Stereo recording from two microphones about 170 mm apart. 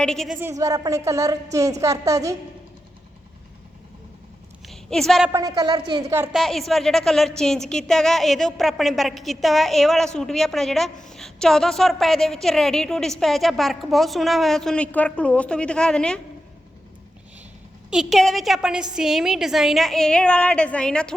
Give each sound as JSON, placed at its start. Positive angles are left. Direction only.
{"t": 0.0, "sound": "a woman's voice", "side_deg": 5}
{"t": 0.3, "sound": "a woman's voice", "side_deg": -15}
{"t": 4.6, "sound": "a sound", "side_deg": 0}
{"t": 5.3, "sound": "a woman's voice", "side_deg": -20}
{"t": 6.3, "sound": "a woman's voice", "side_deg": 0}
{"t": 17.9, "sound": "a woman's voice", "side_deg": 0}